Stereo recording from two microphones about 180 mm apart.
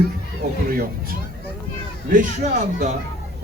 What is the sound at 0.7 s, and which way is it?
Speech, 55° right (ahead or behind).